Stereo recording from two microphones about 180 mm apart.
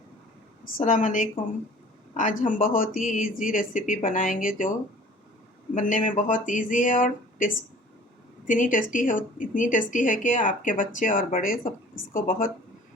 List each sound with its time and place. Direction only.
0.8 s speech: 45° left (ahead or behind)
5.7 s speech: 45° left (ahead or behind)